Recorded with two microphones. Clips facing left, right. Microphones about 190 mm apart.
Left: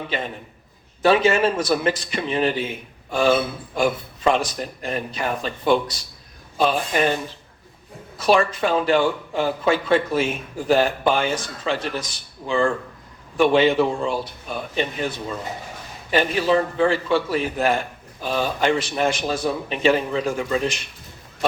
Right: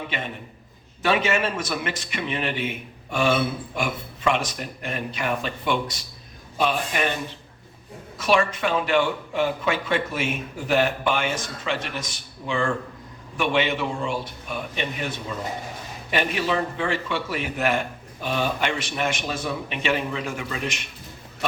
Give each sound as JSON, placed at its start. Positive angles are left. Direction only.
{"t": 1.0, "sound": "a man's voice", "side_deg": 35}
{"t": 8.2, "sound": "a man's voice", "side_deg": 35}
{"t": 16.1, "sound": "a man's voice", "side_deg": 35}